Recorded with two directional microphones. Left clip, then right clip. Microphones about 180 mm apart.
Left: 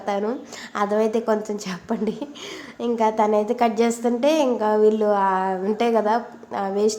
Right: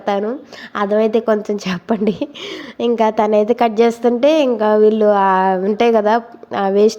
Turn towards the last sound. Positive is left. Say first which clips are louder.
# right 8 dB
turn(degrees=-30)  # may be behind; listen again after turning